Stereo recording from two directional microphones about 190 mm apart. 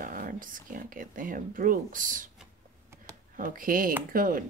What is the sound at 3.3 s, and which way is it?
Speech, 45° right (ahead or behind).